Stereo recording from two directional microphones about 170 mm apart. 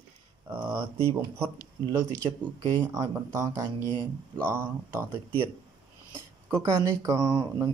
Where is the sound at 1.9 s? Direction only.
20° right (ahead or behind).